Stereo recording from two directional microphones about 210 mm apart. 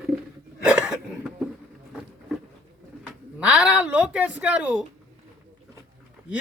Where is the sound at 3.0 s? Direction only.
5° right (ahead or behind).